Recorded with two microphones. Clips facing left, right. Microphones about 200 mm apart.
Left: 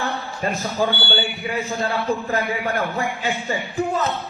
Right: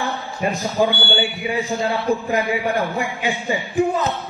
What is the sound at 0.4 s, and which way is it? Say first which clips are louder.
Speech: right 4 dB; 15° right (ahead or behind).